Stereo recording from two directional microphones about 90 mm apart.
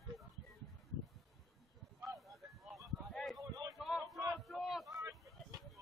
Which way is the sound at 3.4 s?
40° right (ahead or behind).